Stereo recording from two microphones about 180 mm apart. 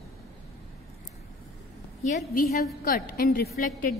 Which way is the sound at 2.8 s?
55° left (ahead or behind).